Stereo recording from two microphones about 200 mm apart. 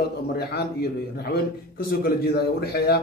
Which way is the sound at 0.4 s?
55° left (ahead or behind).